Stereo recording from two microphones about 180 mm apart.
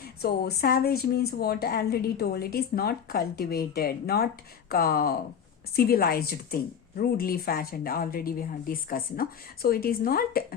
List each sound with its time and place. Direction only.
0.0 s speech: 60° left (ahead or behind)